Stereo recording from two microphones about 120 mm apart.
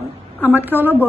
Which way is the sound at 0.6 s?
15° right (ahead or behind).